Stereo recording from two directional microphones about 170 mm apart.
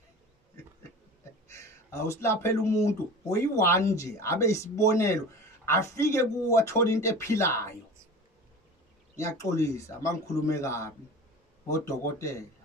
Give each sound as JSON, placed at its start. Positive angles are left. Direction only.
{"t": 1.5, "sound": "speech", "side_deg": 15}
{"t": 9.1, "sound": "speech", "side_deg": 20}